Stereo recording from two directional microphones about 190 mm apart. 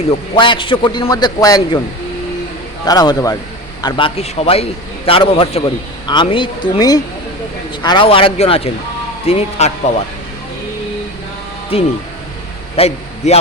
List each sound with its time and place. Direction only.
0.1 s a man's voice: 25° left (ahead or behind)
2.8 s a man's voice: 20° left (ahead or behind); by 9.9 s 35° left (ahead or behind)
11.7 s a man's voice: 30° left (ahead or behind)